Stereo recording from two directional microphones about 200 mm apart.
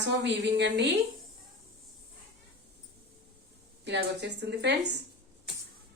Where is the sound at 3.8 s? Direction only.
60° right (ahead or behind).